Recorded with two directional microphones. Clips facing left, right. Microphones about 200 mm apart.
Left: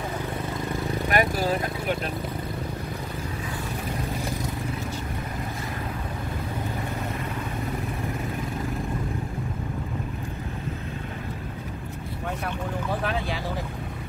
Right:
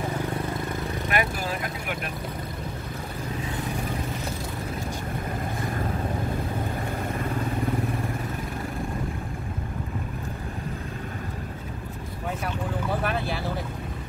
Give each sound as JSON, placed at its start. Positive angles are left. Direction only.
{"t": 1.1, "sound": "vehicle", "side_deg": 40}